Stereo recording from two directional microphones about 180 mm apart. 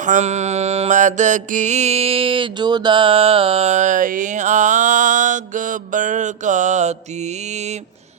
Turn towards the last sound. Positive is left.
turn(degrees=-40)  # may be behind; listen again after turning